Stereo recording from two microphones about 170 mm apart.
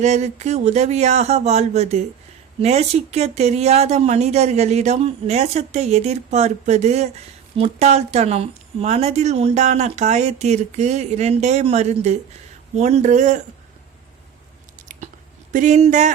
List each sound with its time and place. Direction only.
0.0 s speech: 40° right (ahead or behind)
15.5 s speech: 45° right (ahead or behind)